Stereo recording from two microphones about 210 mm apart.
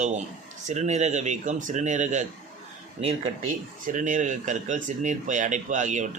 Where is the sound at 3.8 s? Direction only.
35° right (ahead or behind).